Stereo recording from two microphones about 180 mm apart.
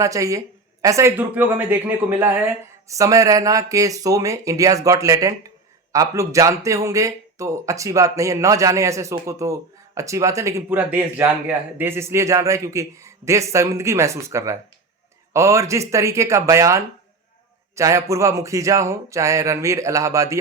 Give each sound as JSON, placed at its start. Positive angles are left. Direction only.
{"t": 0.0, "sound": "speech", "side_deg": -20}